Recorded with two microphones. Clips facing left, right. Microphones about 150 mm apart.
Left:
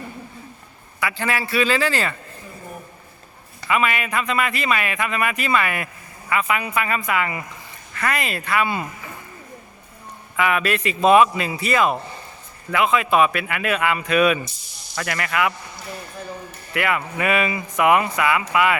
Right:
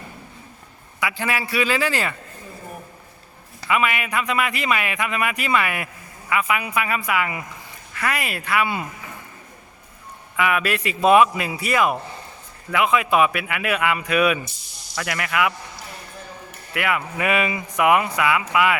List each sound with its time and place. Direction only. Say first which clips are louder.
0.9 s a man's voice: left 1 dB; 15° right (ahead or behind)
3.7 s a man's voice: left 1 dB; 10° right (ahead or behind)
10.3 s a man's voice: left 1 dB; 10° right (ahead or behind)
16.7 s a man's voice: left 1 dB; 10° right (ahead or behind)